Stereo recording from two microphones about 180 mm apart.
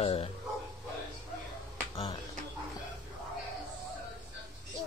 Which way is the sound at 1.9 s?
30° left (ahead or behind).